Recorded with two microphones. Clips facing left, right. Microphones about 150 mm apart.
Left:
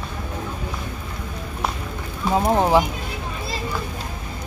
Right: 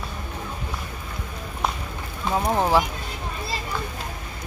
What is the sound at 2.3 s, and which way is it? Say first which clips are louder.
Speech: left 3 dB; 20° left (ahead or behind).